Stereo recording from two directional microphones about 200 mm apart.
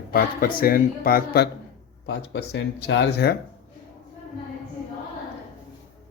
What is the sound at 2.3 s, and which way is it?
Speech, 55° left (ahead or behind).